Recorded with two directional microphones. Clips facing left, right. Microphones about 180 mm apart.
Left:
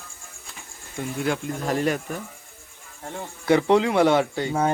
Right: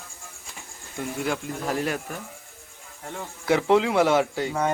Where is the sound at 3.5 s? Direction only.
5° right (ahead or behind).